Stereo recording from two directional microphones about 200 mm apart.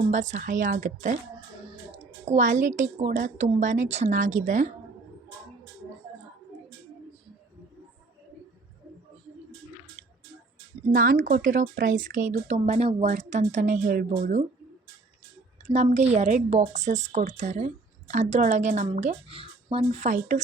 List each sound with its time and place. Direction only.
0.1 s speech: 40° right (ahead or behind)
10.9 s speech: 45° right (ahead or behind)
15.7 s speech: 35° right (ahead or behind)